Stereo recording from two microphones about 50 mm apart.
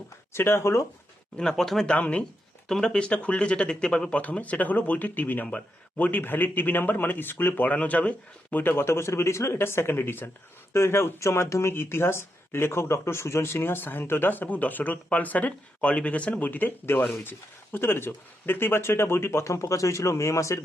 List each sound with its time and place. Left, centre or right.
0.3 s speech: left
1.4 s speech: centre
1.9 s speech: left
2.6 s speech: centre
4.2 s speech: left
8.6 s speech: left
9.6 s speech: left
11.7 s speech: left